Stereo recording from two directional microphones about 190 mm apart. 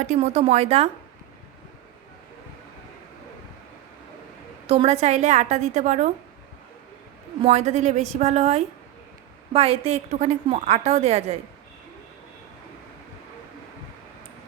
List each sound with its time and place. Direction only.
0.0 s a woman's voice: 35° right (ahead or behind)
4.6 s a woman's voice: 30° right (ahead or behind)
7.4 s a woman's voice: 35° right (ahead or behind)